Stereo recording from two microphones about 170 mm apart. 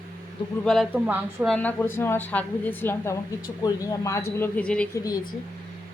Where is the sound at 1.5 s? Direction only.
10° left (ahead or behind).